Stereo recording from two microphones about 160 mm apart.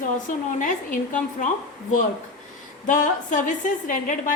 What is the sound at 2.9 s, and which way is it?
A woman's voice, 55° left (ahead or behind).